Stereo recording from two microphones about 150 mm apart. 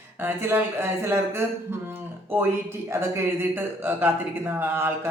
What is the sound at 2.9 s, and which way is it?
Speech, 15° right (ahead or behind).